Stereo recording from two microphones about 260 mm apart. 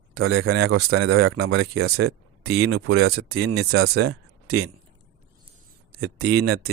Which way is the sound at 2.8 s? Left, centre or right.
Right.